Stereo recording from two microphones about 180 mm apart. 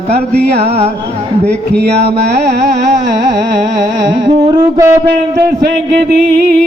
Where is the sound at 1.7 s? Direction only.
65° right (ahead or behind).